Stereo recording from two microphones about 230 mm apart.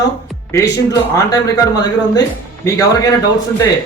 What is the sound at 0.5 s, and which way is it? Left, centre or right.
Speech, centre.